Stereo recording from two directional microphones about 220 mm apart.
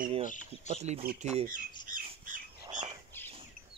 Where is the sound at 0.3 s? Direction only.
35° left (ahead or behind).